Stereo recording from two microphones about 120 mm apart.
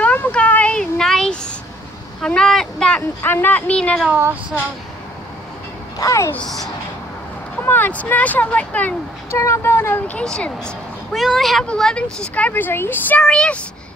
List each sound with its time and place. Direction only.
0.0 s a sound: 15° left (ahead or behind)
2.2 s speech: 5° left (ahead or behind)
3.2 s speech: 20° left (ahead or behind)
4.1 s speech: 15° right (ahead or behind)
5.9 s a child's voice: 25° left (ahead or behind)
6.3 s a child's voice: 5° left (ahead or behind)
7.5 s speech: 15° left (ahead or behind)